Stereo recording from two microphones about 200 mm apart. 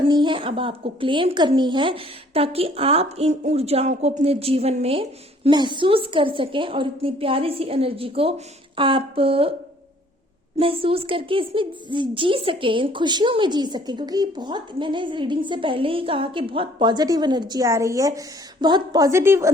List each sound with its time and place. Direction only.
0.1 s a woman's voice: 25° right (ahead or behind)
10.6 s a woman's voice: 30° right (ahead or behind); by 19.5 s 10° right (ahead or behind)